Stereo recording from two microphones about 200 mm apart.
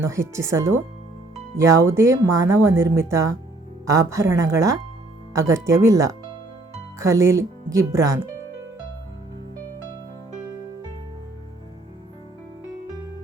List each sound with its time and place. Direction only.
0.0 s speech: 15° right (ahead or behind)